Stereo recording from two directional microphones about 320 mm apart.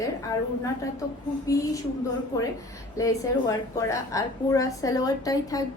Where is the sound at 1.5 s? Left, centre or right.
Centre.